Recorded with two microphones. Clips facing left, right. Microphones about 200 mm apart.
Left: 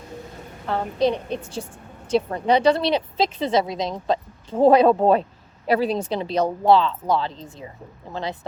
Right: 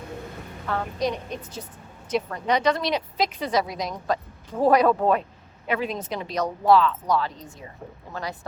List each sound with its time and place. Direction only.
0.7 s a woman's voice: 30° left (ahead or behind)